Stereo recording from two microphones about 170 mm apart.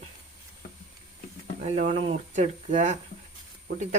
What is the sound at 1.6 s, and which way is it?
Speech, 45° right (ahead or behind).